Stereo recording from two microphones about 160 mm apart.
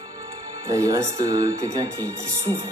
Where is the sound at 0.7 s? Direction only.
20° right (ahead or behind).